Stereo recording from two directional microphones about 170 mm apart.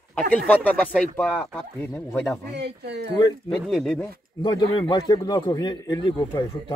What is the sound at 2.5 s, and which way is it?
Speech, 80° right.